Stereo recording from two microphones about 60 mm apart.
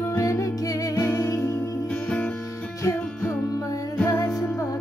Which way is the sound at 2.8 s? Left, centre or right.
Left.